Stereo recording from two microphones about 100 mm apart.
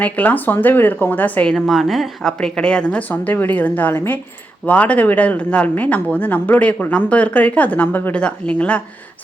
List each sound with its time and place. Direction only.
0.0 s speech: 15° left (ahead or behind)